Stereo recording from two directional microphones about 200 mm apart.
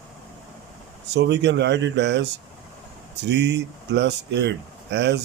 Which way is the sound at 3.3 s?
55° right (ahead or behind).